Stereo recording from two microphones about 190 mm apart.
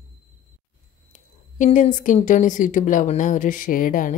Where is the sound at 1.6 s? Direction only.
40° left (ahead or behind).